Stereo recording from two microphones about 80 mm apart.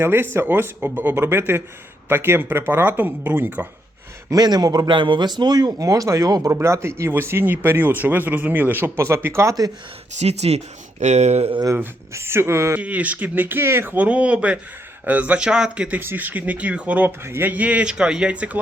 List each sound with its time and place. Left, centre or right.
0.0 s speech: right
4.3 s speech: right
4.9 s speech: right
6.5 s speech: right
11.7 s speech: right
12.7 s speech: centre
16.0 s speech: right
17.5 s speech: centre